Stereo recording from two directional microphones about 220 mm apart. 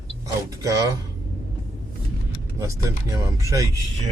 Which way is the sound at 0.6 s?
15° right (ahead or behind).